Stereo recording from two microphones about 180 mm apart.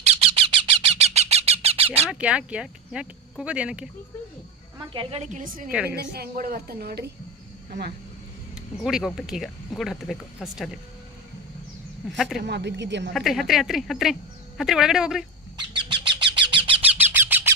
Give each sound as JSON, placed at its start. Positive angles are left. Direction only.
{"t": 0.0, "sound": "a sound", "side_deg": -35}
{"t": 2.0, "sound": "speech", "side_deg": -5}
{"t": 4.9, "sound": "a woman's voice", "side_deg": -35}
{"t": 5.7, "sound": "a woman's voice", "side_deg": -10}
{"t": 6.0, "sound": "a woman's voice", "side_deg": -55}
{"t": 8.8, "sound": "speech", "side_deg": -5}
{"t": 12.1, "sound": "speech", "side_deg": 0}
{"t": 12.4, "sound": "speech", "side_deg": -70}
{"t": 13.1, "sound": "speech", "side_deg": 0}
{"t": 15.5, "sound": "bird", "side_deg": -25}
{"t": 16.9, "sound": "a sound", "side_deg": -10}